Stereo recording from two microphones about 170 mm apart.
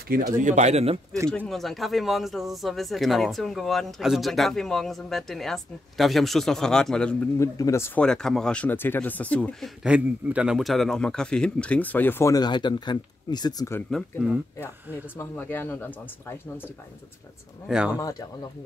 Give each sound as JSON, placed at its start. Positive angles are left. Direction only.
{"t": 0.4, "sound": "speech", "side_deg": -45}
{"t": 1.3, "sound": "speech", "side_deg": 5}
{"t": 7.3, "sound": "a man's voice", "side_deg": 20}
{"t": 9.8, "sound": "a man's voice", "side_deg": -5}
{"t": 13.7, "sound": "a man's voice", "side_deg": 5}
{"t": 17.6, "sound": "speech", "side_deg": -5}